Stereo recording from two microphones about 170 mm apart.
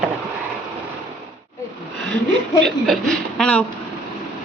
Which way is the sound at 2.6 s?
Centre (ahead or behind).